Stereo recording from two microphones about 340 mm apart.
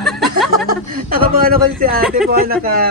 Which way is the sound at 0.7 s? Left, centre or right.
Right.